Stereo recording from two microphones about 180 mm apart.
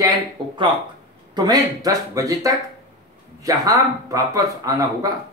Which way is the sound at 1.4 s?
20° right (ahead or behind).